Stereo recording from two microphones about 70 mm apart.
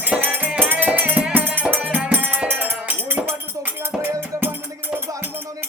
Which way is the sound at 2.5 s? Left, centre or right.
Right.